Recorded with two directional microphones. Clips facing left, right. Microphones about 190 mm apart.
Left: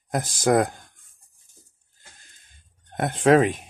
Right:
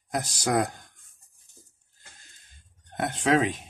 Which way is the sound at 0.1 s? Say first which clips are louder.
Left 6 dB; 50° left (ahead or behind).